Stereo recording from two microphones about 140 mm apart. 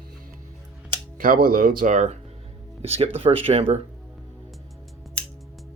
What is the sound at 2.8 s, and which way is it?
Speech, 50° right (ahead or behind).